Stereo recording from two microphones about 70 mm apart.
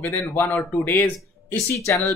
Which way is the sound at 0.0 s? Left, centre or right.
Left.